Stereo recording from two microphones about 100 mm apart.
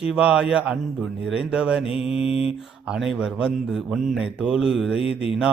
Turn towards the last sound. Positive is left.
turn(degrees=75)  # may be behind; listen again after turning